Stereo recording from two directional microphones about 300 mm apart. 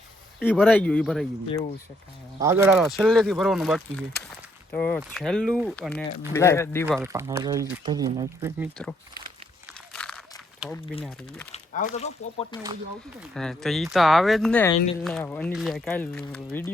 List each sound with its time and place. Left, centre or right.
0.3 s speech: centre
6.8 s speech: centre
9.9 s a sound: centre
11.0 s speech: centre
11.5 s speech: left
13.3 s speech: centre